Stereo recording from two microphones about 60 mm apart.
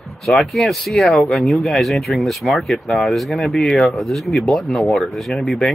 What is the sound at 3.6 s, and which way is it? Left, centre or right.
Speech, centre.